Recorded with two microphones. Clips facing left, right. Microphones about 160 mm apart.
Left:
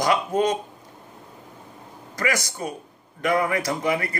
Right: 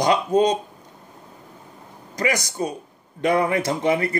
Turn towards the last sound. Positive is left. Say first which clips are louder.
# right 3 dB
turn(degrees=-25)  # may be behind; listen again after turning